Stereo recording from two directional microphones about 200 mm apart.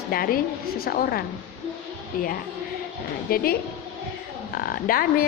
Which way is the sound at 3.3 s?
50° left (ahead or behind).